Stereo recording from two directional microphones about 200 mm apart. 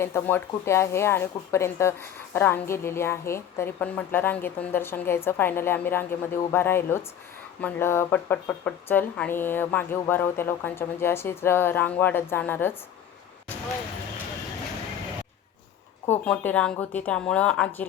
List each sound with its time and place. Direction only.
0.0 s speech: 10° left (ahead or behind)
16.0 s a woman's voice: 5° left (ahead or behind)